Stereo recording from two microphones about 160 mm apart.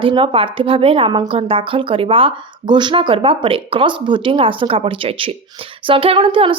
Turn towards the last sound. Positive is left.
turn(degrees=-35)  # may be behind; listen again after turning